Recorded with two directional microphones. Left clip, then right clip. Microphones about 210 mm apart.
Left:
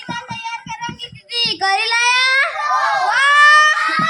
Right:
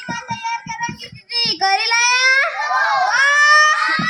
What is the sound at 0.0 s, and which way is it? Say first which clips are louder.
Child singing: right 1 dB; 25° right (ahead or behind).